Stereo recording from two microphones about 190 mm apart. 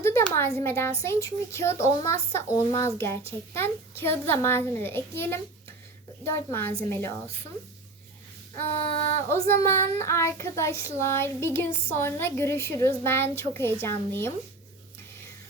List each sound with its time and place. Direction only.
0.0 s a child's voice: 15° left (ahead or behind)
8.6 s a sound: 30° left (ahead or behind)
9.3 s a child's voice: 15° left (ahead or behind)